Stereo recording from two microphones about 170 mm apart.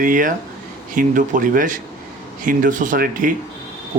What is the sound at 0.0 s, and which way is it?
Speech, 50° right (ahead or behind).